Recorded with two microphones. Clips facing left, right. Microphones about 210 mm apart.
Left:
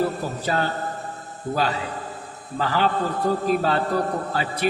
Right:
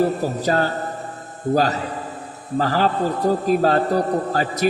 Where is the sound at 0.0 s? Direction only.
40° right (ahead or behind).